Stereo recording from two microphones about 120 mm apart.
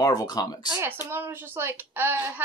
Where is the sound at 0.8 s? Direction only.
20° right (ahead or behind).